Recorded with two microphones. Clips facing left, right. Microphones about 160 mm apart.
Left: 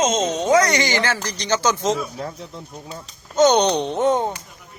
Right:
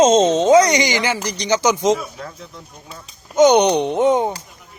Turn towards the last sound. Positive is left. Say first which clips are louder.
# right 3 dB
turn(degrees=-15)  # may be behind; listen again after turning